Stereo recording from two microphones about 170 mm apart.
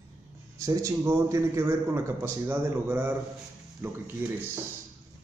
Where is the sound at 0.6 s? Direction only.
20° right (ahead or behind).